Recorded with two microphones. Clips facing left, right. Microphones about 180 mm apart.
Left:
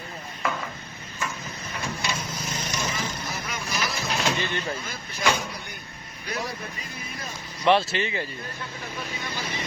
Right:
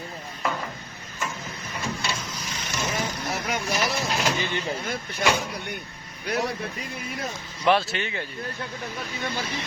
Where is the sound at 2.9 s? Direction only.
65° right (ahead or behind).